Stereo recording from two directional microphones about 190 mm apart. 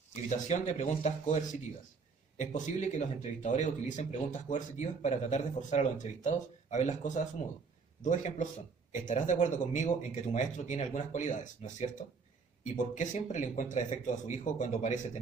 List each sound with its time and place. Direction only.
0.1 s speech: 40° left (ahead or behind)